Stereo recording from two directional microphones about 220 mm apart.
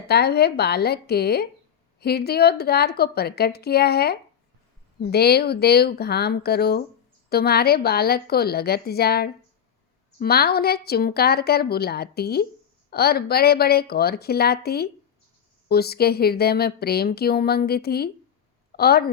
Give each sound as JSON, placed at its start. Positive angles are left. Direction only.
{"t": 0.1, "sound": "a woman's voice", "side_deg": 45}